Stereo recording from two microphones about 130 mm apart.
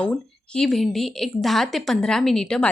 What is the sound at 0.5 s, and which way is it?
A woman's voice, centre (ahead or behind).